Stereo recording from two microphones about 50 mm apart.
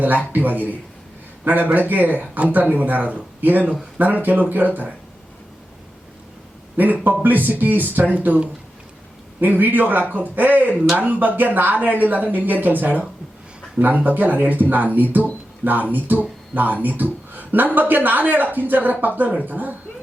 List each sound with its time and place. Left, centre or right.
0.3 s speech: right
6.7 s speech: right